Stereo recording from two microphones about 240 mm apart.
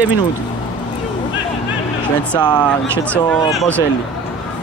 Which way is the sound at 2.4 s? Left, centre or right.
Centre.